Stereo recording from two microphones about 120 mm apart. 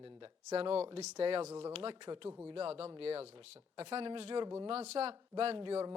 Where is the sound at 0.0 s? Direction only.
45° right (ahead or behind).